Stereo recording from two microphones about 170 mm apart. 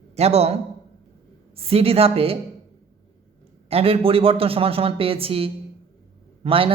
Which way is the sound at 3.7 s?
35° right (ahead or behind).